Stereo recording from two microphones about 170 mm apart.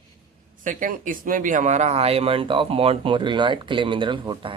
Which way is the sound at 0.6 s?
50° right (ahead or behind).